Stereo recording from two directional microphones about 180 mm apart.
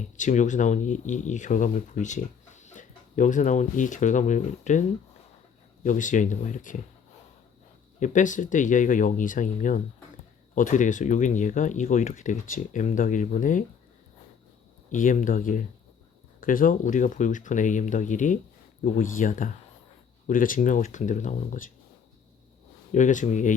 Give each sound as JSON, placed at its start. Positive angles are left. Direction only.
{"t": 0.0, "sound": "speech", "side_deg": 45}
{"t": 7.9, "sound": "speech", "side_deg": 45}
{"t": 14.9, "sound": "speech", "side_deg": 45}
{"t": 22.9, "sound": "speech", "side_deg": 45}